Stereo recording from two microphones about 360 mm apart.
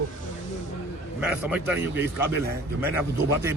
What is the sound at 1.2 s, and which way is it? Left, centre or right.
Speech, centre.